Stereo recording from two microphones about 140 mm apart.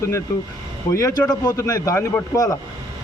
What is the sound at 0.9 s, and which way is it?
Speech, 25° left (ahead or behind).